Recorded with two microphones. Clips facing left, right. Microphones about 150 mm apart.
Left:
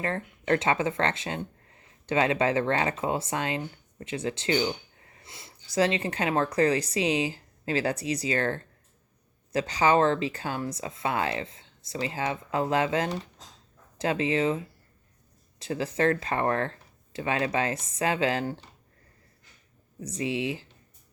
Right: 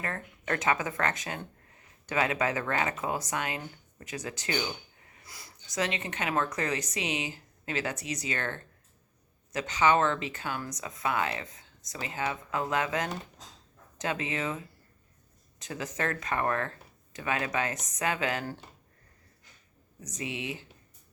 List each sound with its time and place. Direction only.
0.0 s speech: 30° left (ahead or behind)
20.0 s speech: 30° left (ahead or behind)